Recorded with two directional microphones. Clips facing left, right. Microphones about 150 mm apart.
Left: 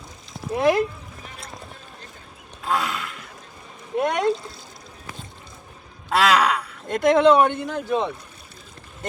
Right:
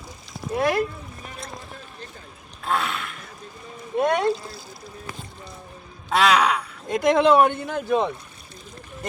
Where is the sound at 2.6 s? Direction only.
15° left (ahead or behind).